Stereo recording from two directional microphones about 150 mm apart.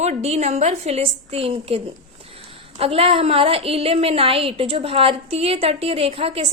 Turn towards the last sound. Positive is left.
turn(degrees=-40)  # may be behind; listen again after turning